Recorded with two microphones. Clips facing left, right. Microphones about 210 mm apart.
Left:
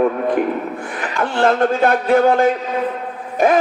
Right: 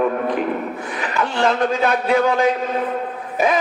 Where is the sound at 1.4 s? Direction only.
50° left (ahead or behind).